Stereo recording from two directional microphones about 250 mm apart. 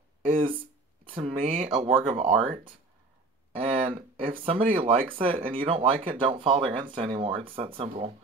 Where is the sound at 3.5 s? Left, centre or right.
Right.